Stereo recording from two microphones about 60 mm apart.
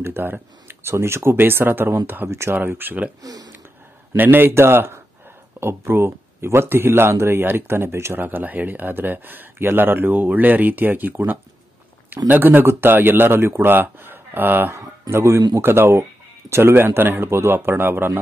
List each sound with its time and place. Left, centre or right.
0.0 s speech: right
2.2 s speech: right
2.5 s speech: right
3.2 s speech: right
4.2 s speech: right
8.2 s speech: right
15.0 s speech: right